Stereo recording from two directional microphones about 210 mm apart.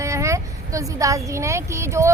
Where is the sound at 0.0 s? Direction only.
15° right (ahead or behind).